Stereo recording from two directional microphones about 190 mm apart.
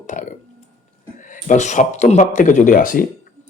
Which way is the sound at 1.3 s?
40° left (ahead or behind).